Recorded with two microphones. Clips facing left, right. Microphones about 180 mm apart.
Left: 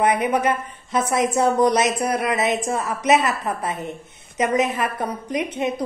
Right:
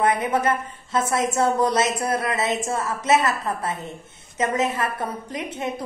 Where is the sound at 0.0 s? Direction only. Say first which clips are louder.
Left 2 dB; 20° left (ahead or behind).